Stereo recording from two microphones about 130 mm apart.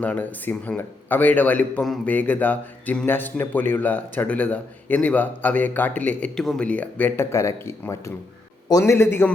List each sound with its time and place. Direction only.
0.0 s a man's voice: 10° left (ahead or behind)
6.4 s a man's voice: centre (ahead or behind)
6.7 s speech: 10° left (ahead or behind)